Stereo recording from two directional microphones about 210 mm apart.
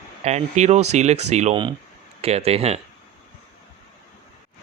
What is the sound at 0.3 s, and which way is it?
Speech, 35° right (ahead or behind).